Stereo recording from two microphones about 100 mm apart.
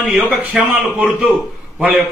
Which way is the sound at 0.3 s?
15° right (ahead or behind).